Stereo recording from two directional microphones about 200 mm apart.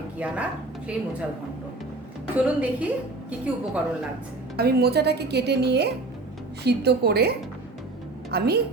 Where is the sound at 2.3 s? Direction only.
5° right (ahead or behind).